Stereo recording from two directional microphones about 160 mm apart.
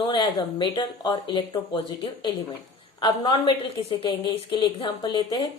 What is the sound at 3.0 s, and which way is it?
Speech, 25° left (ahead or behind).